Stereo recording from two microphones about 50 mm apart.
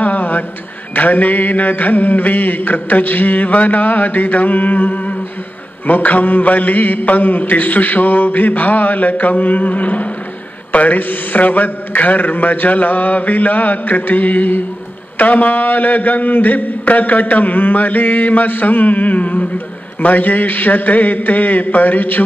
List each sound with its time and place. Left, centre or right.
0.0 s mantra: left